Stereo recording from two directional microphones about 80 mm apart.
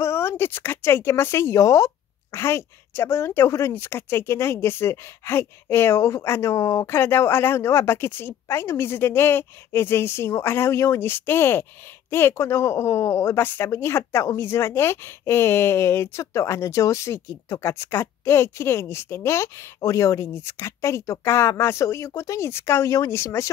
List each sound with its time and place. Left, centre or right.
0.0 s a woman's voice: left